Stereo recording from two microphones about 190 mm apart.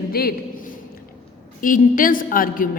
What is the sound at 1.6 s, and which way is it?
A woman's voice, 45° left (ahead or behind).